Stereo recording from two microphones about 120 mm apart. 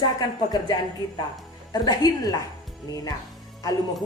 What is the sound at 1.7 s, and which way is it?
A woman's voice, 35° left (ahead or behind).